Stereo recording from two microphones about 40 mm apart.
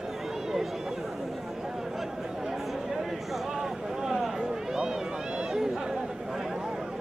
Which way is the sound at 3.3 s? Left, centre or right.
Centre.